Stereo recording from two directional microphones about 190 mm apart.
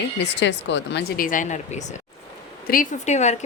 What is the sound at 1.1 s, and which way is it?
A woman's voice, 45° left (ahead or behind).